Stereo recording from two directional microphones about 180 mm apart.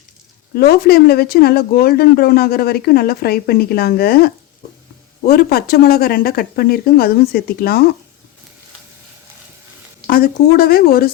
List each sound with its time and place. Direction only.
0.5 s speech: 60° left (ahead or behind)
10.1 s speech: 55° left (ahead or behind)